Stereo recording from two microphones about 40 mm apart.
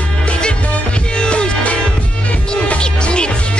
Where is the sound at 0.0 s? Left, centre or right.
Left.